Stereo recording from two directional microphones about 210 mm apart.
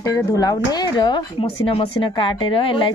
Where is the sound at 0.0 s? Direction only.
15° left (ahead or behind).